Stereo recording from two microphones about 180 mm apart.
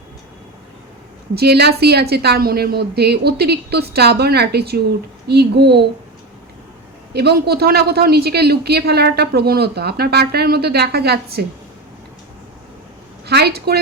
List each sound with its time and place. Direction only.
1.4 s speech: 65° right (ahead or behind)
7.1 s speech: 65° right (ahead or behind)
13.2 s a woman's voice: 65° right (ahead or behind)